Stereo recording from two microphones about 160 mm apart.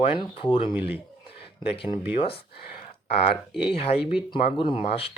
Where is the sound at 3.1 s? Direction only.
35° left (ahead or behind).